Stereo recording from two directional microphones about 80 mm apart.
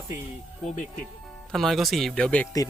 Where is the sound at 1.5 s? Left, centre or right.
Centre.